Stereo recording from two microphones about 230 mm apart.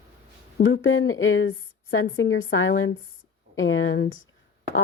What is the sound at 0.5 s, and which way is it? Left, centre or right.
Speech, left.